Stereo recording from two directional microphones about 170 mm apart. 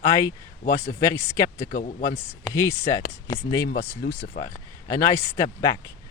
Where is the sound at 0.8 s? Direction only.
15° left (ahead or behind).